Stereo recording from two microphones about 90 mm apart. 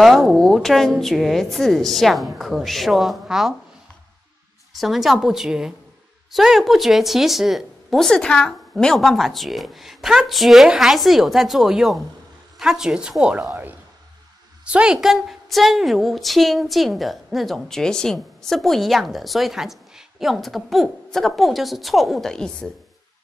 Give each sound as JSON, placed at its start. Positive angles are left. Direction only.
{"t": 0.0, "sound": "a woman's voice", "side_deg": 0}
{"t": 4.7, "sound": "a woman's voice", "side_deg": 0}